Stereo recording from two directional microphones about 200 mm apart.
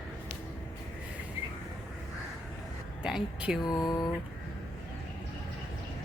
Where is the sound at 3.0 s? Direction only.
5° right (ahead or behind).